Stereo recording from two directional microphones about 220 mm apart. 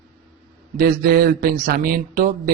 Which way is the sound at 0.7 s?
40° right (ahead or behind).